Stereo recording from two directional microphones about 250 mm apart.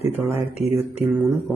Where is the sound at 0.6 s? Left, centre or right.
Left.